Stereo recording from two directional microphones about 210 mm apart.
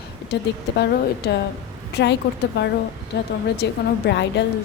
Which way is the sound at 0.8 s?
50° left (ahead or behind).